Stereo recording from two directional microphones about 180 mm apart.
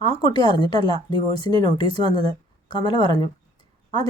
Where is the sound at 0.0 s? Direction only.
25° left (ahead or behind).